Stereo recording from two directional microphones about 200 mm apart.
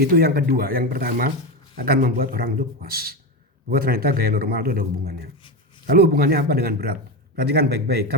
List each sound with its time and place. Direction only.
0.0 s a man's voice: 50° right (ahead or behind)